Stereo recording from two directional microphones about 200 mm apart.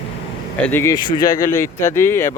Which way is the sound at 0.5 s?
10° left (ahead or behind).